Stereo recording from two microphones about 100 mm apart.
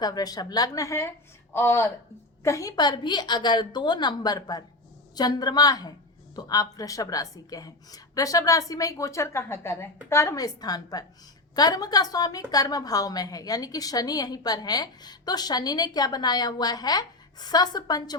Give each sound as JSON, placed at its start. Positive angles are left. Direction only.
{"t": 0.0, "sound": "a woman's voice", "side_deg": 40}